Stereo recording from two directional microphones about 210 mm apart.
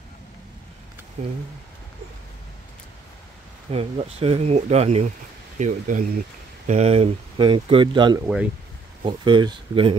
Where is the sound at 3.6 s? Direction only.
30° right (ahead or behind).